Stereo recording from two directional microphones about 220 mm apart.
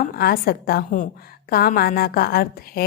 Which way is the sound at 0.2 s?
45° left (ahead or behind).